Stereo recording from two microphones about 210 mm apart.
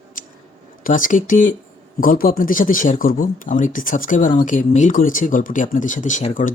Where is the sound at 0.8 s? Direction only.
40° left (ahead or behind).